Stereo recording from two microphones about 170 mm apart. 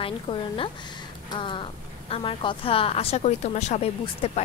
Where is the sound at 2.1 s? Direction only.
30° left (ahead or behind).